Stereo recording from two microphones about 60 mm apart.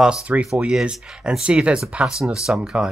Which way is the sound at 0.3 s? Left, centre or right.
Right.